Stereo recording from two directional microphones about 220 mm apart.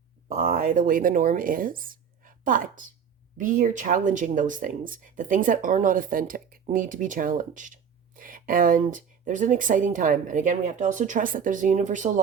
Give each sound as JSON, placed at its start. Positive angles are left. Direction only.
{"t": 0.3, "sound": "speech", "side_deg": -35}